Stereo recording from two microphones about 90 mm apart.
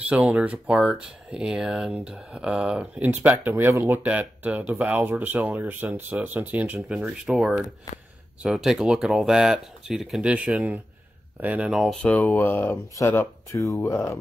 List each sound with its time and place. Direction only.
0.3 s speech: 15° right (ahead or behind)
3.0 s speech: 20° right (ahead or behind)
4.0 s speech: 20° right (ahead or behind)
7.0 s speech: 5° right (ahead or behind)
11.7 s speech: centre (ahead or behind)
12.2 s speech: 25° left (ahead or behind)